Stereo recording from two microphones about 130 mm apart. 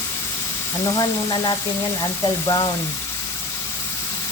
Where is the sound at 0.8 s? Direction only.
35° left (ahead or behind).